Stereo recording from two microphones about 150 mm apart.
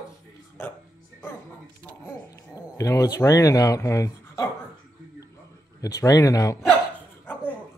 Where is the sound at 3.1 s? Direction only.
20° left (ahead or behind).